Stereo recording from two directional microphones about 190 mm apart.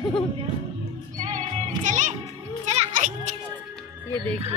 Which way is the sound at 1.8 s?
40° right (ahead or behind).